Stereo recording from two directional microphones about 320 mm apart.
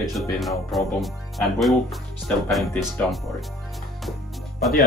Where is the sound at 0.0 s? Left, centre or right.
Centre.